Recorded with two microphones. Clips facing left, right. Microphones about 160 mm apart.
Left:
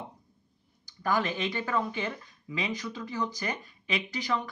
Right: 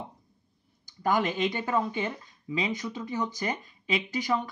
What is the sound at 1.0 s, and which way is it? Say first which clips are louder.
Speech: right 3 dB; 20° right (ahead or behind).